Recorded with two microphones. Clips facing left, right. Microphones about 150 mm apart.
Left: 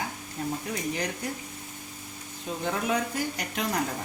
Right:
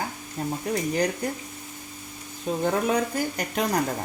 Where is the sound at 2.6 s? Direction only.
40° right (ahead or behind).